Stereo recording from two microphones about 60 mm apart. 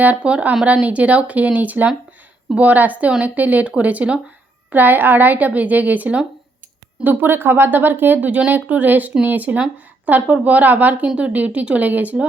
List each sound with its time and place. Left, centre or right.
0.0 s speech: right